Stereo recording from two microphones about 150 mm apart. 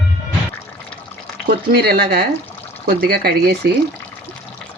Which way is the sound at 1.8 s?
90° right.